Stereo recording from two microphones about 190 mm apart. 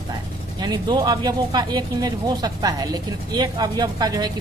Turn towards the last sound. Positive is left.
turn(degrees=-20)  # may be behind; listen again after turning